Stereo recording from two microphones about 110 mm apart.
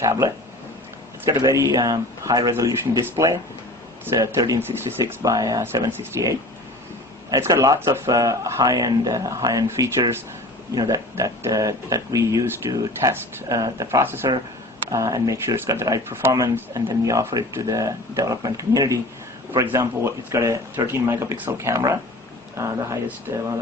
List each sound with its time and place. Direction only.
0.0 s speech: 30° right (ahead or behind)
2.5 s speech: 25° right (ahead or behind)
14.0 s speech: 20° right (ahead or behind)
14.8 s speech: 30° right (ahead or behind)